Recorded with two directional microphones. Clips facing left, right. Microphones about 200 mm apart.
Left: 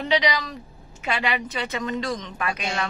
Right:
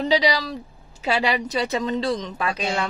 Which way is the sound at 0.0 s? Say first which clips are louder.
Right 3 dB; 35° right (ahead or behind).